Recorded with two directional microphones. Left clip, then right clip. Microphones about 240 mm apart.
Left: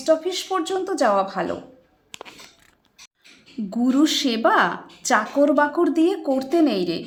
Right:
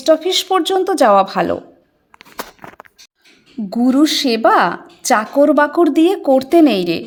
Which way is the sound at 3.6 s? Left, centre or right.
Right.